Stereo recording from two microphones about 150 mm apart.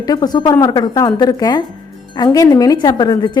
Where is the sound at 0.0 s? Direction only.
25° left (ahead or behind).